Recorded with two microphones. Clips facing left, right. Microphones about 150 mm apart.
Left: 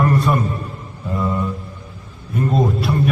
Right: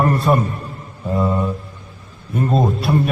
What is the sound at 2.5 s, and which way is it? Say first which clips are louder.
Speech: right 2 dB; 25° right (ahead or behind).